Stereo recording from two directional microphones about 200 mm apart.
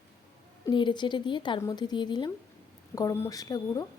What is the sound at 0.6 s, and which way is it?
A woman's voice, 20° left (ahead or behind).